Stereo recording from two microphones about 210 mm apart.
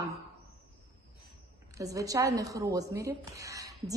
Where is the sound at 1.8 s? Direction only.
15° right (ahead or behind).